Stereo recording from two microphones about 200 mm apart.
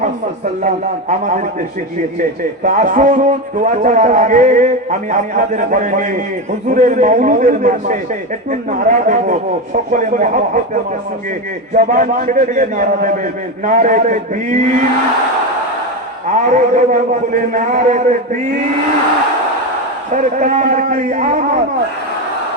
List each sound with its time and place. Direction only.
2.6 s a man's voice: 40° right (ahead or behind)
11.7 s a man's voice: 40° right (ahead or behind)
16.3 s a man's voice: 40° right (ahead or behind)
20.4 s a man's voice: 40° right (ahead or behind)